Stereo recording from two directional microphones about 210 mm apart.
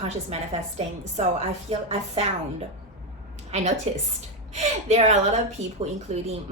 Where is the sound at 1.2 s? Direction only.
35° right (ahead or behind).